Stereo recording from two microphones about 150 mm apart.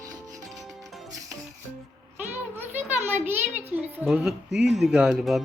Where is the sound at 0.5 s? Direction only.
Centre (ahead or behind).